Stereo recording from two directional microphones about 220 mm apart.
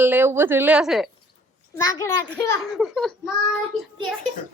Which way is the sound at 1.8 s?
15° left (ahead or behind).